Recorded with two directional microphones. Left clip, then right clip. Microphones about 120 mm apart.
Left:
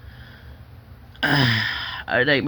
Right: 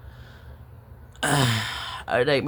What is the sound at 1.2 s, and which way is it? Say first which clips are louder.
Speech: left 4 dB; 25° right (ahead or behind).